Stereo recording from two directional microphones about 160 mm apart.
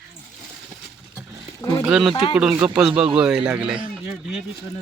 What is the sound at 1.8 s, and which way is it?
Speech, 5° right (ahead or behind).